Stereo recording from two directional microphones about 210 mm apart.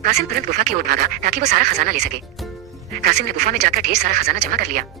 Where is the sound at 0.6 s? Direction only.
40° right (ahead or behind).